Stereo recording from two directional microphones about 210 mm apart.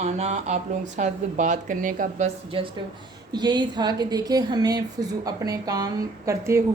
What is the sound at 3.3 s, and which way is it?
A woman's voice, 20° right (ahead or behind).